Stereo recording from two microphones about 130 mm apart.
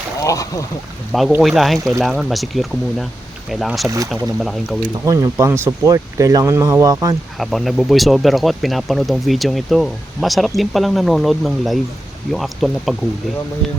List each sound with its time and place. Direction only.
0.2 s speech: 25° left (ahead or behind)
1.4 s speech: centre (ahead or behind)
3.8 s speech: 25° right (ahead or behind)
4.4 s speech: centre (ahead or behind)
5.0 s speech: 25° right (ahead or behind)
7.3 s speech: centre (ahead or behind)